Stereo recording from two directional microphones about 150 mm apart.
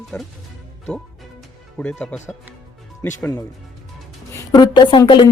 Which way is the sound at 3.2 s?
25° left (ahead or behind).